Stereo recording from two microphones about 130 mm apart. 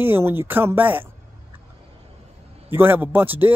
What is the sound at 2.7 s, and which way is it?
Speech, 15° right (ahead or behind).